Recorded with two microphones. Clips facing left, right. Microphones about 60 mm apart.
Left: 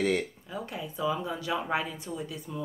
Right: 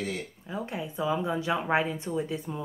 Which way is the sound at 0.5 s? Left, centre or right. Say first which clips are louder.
Right 4 dB; right.